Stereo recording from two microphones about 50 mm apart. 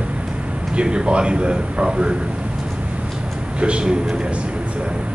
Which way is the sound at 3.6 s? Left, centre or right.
Right.